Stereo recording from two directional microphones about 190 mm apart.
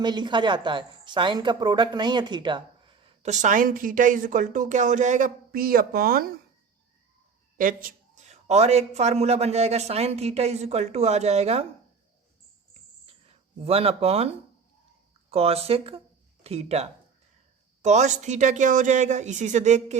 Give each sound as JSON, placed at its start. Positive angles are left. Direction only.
{"t": 0.0, "sound": "a woman's voice", "side_deg": -25}
{"t": 7.6, "sound": "a woman's voice", "side_deg": -45}
{"t": 13.6, "sound": "a woman's voice", "side_deg": -30}